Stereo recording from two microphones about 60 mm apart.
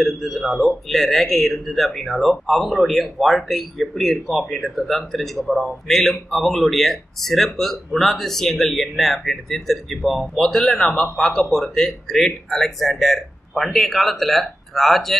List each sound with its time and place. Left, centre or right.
0.0 s speech: centre